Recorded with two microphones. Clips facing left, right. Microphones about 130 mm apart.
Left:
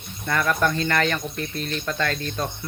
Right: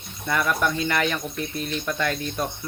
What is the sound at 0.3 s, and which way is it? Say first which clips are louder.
Speech: left 1 dB; 10° right (ahead or behind).